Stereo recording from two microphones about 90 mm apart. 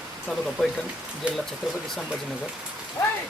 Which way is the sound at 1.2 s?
15° right (ahead or behind).